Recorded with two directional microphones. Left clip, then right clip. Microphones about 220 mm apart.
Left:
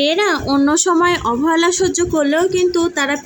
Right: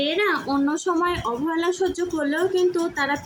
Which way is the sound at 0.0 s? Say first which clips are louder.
Left 7 dB; 30° left (ahead or behind).